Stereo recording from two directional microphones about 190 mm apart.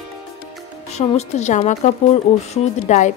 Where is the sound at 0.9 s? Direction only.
35° left (ahead or behind).